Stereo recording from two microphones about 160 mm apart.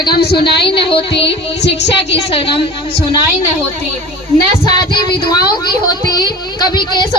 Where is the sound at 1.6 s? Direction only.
90° left.